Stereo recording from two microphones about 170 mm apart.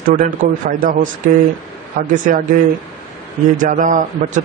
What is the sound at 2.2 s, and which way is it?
Speech, 50° right (ahead or behind).